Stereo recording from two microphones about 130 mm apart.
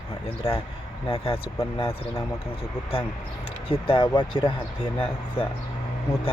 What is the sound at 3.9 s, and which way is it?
Speech, 40° left (ahead or behind).